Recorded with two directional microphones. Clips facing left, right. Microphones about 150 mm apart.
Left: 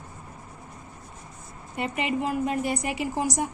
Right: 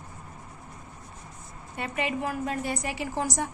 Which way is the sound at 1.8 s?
20° left (ahead or behind).